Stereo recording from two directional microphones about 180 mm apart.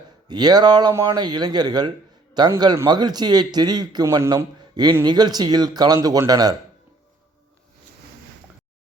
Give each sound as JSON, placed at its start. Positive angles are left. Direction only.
{"t": 0.3, "sound": "a man's voice", "side_deg": -25}